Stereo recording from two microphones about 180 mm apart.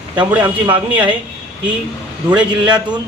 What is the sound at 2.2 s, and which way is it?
Speech, 5° right (ahead or behind).